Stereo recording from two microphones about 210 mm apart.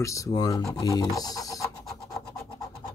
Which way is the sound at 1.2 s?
15° left (ahead or behind).